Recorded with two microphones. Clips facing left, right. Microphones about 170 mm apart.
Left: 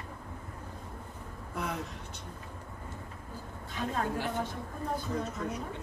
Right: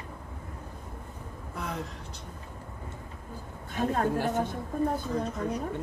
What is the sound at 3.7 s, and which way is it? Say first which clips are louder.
Speech: right 6 dB; 45° right (ahead or behind).